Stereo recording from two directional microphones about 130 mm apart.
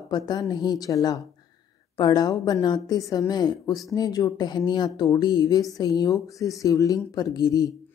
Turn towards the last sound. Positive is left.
turn(degrees=30)  # may be behind; listen again after turning